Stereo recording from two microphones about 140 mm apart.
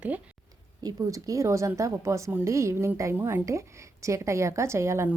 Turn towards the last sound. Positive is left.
turn(degrees=-20)  # may be behind; listen again after turning